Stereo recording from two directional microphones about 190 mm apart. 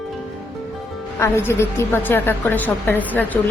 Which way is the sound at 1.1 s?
15° left (ahead or behind).